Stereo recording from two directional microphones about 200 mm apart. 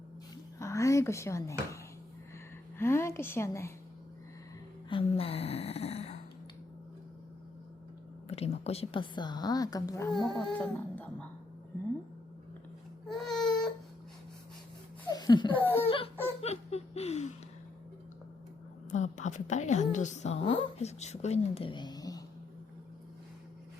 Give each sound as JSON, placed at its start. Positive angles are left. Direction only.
{"t": 0.6, "sound": "a sound", "side_deg": 15}
{"t": 2.7, "sound": "a woman's voice", "side_deg": 10}
{"t": 4.9, "sound": "speech", "side_deg": 25}
{"t": 8.3, "sound": "a woman's voice", "side_deg": 30}
{"t": 10.6, "sound": "speech", "side_deg": 5}
{"t": 13.1, "sound": "baby cry", "side_deg": 0}
{"t": 15.1, "sound": "speech", "side_deg": 20}
{"t": 15.6, "sound": "laughter", "side_deg": 10}
{"t": 16.4, "sound": "chuckle", "side_deg": 30}
{"t": 18.9, "sound": "a woman's voice", "side_deg": 35}